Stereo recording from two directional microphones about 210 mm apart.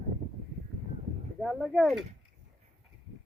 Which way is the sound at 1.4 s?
Centre (ahead or behind).